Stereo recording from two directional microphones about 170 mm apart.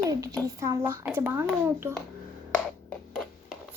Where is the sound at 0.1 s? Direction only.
20° right (ahead or behind).